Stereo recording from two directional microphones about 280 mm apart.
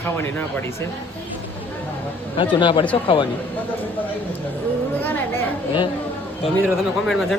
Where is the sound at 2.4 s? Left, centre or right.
Centre.